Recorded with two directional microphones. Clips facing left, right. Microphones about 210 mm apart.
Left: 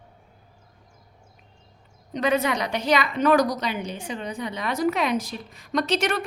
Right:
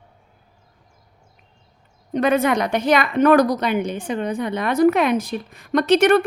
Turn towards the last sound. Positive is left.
turn(degrees=-55)  # may be behind; listen again after turning